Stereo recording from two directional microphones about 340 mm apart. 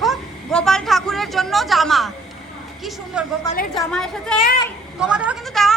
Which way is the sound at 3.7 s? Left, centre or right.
Centre.